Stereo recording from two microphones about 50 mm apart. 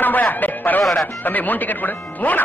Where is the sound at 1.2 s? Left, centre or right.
Left.